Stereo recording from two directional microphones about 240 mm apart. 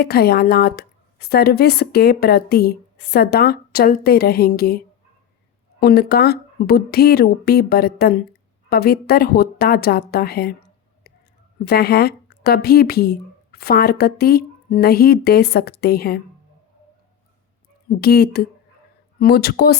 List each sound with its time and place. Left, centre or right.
0.0 s a woman's voice: left
5.8 s a woman's voice: left
18.0 s a woman's voice: left